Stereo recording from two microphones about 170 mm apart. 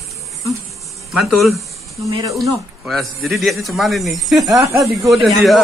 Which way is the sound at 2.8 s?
Centre (ahead or behind).